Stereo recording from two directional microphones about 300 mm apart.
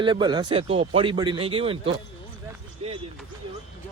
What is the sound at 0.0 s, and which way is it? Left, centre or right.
Speech, centre.